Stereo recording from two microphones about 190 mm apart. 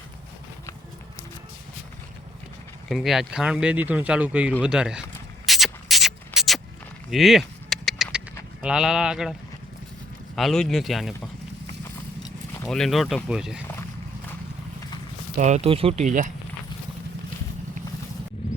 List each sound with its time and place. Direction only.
2.9 s speech: centre (ahead or behind)
5.5 s beatboxing: centre (ahead or behind)
7.1 s a sound: centre (ahead or behind)
8.6 s speech: 5° right (ahead or behind)
10.3 s speech: centre (ahead or behind)
12.6 s speech: 5° left (ahead or behind)
15.4 s speech: 35° right (ahead or behind)